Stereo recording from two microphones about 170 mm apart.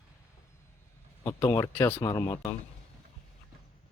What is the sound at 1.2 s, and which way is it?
Speech, 15° left (ahead or behind).